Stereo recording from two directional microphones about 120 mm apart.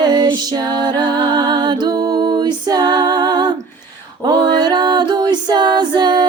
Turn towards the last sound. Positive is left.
turn(degrees=-40)  # may be behind; listen again after turning